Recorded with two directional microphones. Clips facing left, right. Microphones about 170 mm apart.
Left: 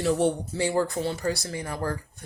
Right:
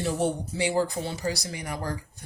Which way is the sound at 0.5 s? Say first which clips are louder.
Left 1 dB; 15° right (ahead or behind).